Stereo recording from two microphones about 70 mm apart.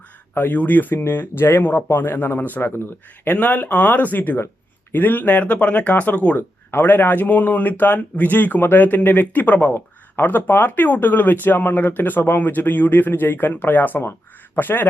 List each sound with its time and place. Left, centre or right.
0.3 s speech: left